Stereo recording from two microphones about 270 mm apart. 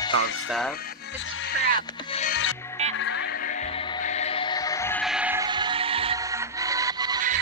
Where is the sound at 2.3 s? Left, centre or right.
Left; by 7.2 s centre.